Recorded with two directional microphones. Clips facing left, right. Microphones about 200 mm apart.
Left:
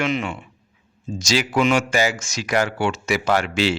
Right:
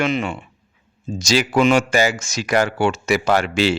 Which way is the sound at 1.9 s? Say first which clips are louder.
Right 3 dB; 60° right (ahead or behind).